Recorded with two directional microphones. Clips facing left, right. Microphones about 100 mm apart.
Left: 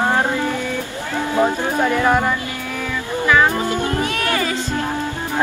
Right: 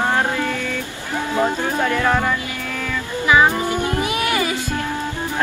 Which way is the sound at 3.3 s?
15° right (ahead or behind).